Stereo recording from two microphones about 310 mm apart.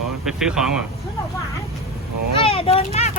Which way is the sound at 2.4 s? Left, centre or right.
Centre.